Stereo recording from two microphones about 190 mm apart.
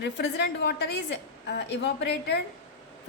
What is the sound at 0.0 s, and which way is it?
A woman's voice, 65° left (ahead or behind).